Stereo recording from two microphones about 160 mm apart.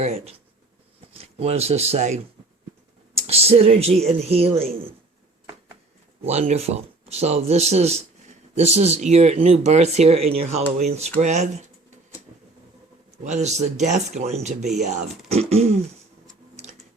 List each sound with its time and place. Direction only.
0.0 s a man's voice: 45° right (ahead or behind)
6.5 s a man's voice: 40° right (ahead or behind)
13.2 s a man's voice: 45° right (ahead or behind)